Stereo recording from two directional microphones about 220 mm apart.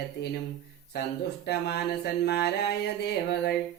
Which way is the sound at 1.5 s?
50° left (ahead or behind).